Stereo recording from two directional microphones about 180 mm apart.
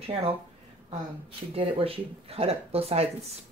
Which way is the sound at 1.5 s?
30° right (ahead or behind).